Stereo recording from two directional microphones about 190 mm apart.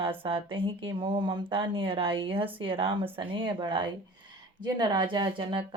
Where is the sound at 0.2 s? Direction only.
30° right (ahead or behind).